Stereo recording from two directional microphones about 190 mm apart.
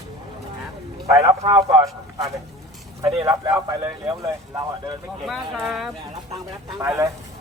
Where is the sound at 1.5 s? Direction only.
20° right (ahead or behind).